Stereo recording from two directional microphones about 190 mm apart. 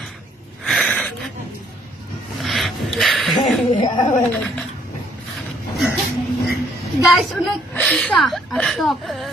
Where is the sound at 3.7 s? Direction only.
25° left (ahead or behind).